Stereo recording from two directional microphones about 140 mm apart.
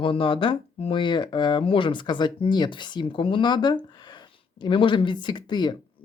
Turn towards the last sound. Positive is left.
turn(degrees=30)  # may be behind; listen again after turning